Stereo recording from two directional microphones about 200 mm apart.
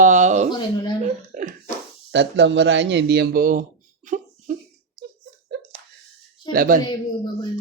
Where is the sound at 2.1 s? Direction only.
60° right (ahead or behind); by 3.6 s 45° right (ahead or behind).